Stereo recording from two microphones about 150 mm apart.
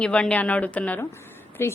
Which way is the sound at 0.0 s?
5° left (ahead or behind).